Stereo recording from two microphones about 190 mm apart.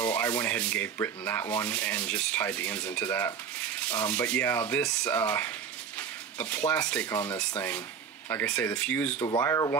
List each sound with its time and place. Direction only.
0.0 s speech: 10° left (ahead or behind)
5.9 s dishes: 10° left (ahead or behind)
6.9 s speech: 10° left (ahead or behind)
9.2 s speech: 20° left (ahead or behind)